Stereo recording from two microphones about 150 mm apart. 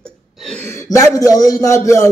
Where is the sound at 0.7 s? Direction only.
20° left (ahead or behind).